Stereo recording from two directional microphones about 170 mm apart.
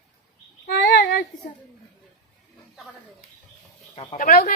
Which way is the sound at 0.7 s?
80° left.